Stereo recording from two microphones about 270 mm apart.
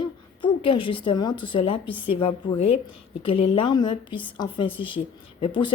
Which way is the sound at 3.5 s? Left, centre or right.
Centre.